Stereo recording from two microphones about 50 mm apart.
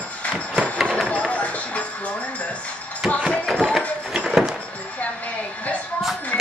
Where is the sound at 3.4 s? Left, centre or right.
Centre.